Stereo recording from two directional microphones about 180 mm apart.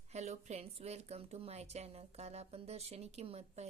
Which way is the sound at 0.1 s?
40° right (ahead or behind).